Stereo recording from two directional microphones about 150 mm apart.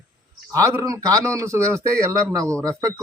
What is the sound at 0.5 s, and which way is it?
A man's voice, 20° right (ahead or behind).